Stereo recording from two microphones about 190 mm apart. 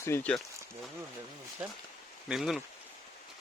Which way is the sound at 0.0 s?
10° left (ahead or behind).